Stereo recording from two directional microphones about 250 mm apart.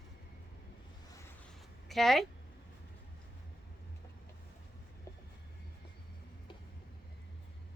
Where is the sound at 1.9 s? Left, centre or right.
Centre.